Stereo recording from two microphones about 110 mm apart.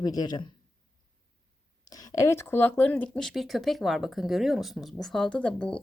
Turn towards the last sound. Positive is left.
turn(degrees=10)  # may be behind; listen again after turning